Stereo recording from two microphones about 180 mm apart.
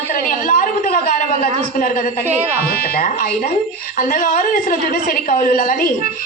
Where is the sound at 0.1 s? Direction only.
45° left (ahead or behind).